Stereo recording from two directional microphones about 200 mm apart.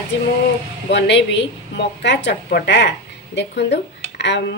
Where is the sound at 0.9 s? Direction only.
60° left (ahead or behind).